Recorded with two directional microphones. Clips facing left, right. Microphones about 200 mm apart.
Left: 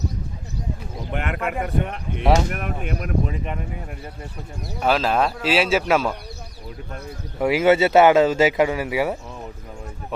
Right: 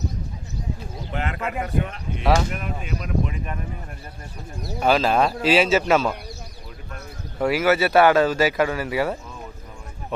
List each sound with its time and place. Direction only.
1.1 s a sound: 60° left (ahead or behind)
1.5 s speech: 60° left (ahead or behind)
3.2 s speech: 25° left (ahead or behind)
4.8 s speech: centre (ahead or behind)
7.3 s speech: 15° left (ahead or behind)
7.6 s speech: 25° left (ahead or behind); by 10.3 s 5° left (ahead or behind)